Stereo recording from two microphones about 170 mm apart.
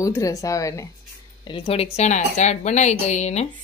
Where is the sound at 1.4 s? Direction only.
30° left (ahead or behind).